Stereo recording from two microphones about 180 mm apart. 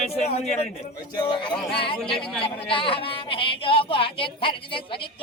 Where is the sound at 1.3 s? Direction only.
30° left (ahead or behind).